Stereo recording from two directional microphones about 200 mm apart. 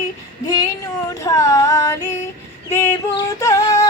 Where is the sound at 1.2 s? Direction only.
15° left (ahead or behind).